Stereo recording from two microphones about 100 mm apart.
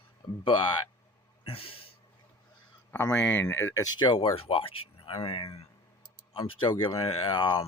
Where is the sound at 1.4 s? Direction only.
70° left (ahead or behind).